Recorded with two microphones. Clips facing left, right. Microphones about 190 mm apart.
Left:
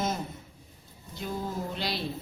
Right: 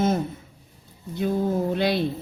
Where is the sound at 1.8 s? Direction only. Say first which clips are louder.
Right 11 dB; 55° right (ahead or behind).